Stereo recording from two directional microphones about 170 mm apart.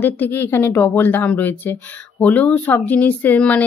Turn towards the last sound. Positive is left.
turn(degrees=10)  # may be behind; listen again after turning